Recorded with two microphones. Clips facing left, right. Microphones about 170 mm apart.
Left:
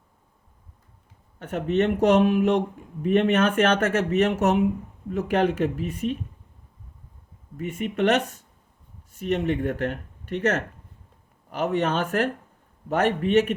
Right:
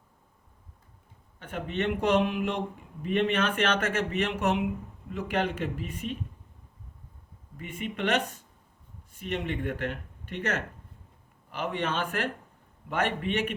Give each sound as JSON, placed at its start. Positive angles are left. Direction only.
{"t": 1.4, "sound": "speech", "side_deg": 45}
{"t": 7.5, "sound": "speech", "side_deg": 45}